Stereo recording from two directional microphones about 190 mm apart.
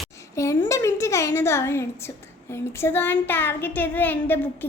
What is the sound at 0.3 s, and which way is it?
A woman's voice, 15° left (ahead or behind).